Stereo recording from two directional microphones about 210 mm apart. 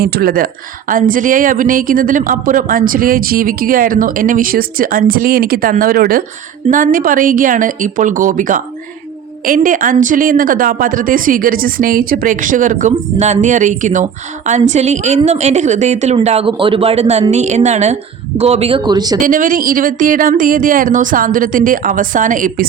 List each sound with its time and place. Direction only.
0.0 s a woman's voice: 45° right (ahead or behind); by 19.2 s 20° right (ahead or behind)
19.2 s a woman's voice: 40° right (ahead or behind)